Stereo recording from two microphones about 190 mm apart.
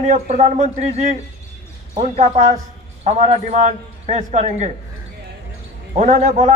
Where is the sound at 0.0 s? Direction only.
40° right (ahead or behind).